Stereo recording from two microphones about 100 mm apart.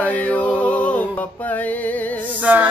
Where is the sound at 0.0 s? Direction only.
15° left (ahead or behind).